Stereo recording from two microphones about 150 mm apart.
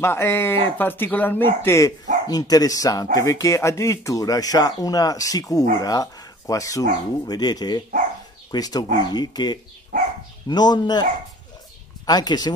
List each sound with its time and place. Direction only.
0.0 s speech: 15° left (ahead or behind)
12.1 s speech: 25° left (ahead or behind)